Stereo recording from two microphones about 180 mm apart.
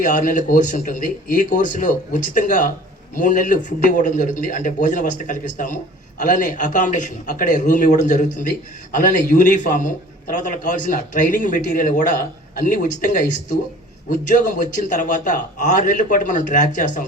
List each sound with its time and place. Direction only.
0.0 s a man's voice: 45° left (ahead or behind)